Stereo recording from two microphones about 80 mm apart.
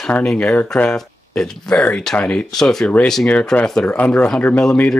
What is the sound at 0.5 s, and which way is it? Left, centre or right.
Speech, centre.